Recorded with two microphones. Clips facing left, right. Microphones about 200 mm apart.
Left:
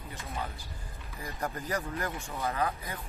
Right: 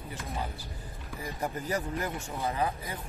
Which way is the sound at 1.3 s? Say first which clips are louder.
Right 1 dB; 10° right (ahead or behind).